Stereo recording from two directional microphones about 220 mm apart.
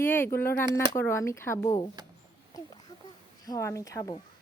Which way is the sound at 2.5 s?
20° left (ahead or behind).